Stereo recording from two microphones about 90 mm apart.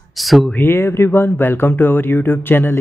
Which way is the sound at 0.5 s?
25° left (ahead or behind).